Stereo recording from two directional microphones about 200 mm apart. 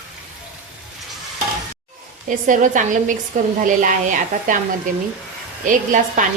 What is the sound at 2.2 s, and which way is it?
Speech, 40° right (ahead or behind).